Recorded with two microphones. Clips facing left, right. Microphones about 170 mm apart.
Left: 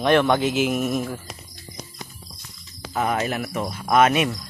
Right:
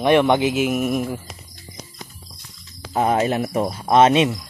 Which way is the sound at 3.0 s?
30° right (ahead or behind).